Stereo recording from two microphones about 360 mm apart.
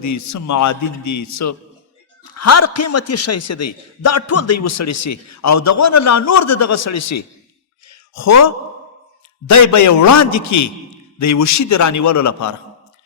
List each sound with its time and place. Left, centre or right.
0.0 s a man's voice: left
7.9 s a sound: left
9.5 s a man's voice: left